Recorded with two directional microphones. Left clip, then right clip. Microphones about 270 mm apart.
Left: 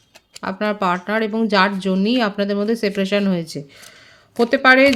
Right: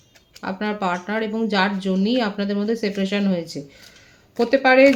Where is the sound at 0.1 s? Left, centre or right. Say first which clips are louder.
Left 3 dB; left.